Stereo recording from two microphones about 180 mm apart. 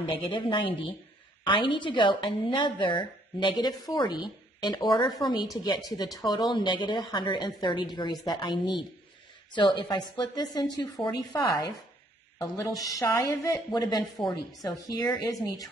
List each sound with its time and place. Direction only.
0.0 s a woman's voice: 25° left (ahead or behind)